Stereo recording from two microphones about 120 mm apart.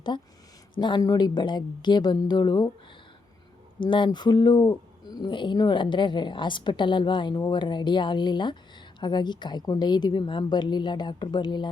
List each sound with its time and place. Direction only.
0.8 s speech: 40° left (ahead or behind)
3.8 s speech: 40° left (ahead or behind)